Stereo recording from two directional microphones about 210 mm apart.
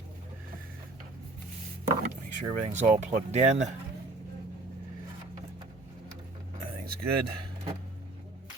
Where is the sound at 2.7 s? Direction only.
35° right (ahead or behind).